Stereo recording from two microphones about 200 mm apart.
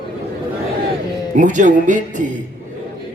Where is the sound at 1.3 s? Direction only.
40° right (ahead or behind).